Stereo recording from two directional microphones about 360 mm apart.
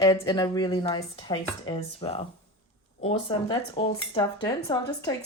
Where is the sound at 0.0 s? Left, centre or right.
Centre.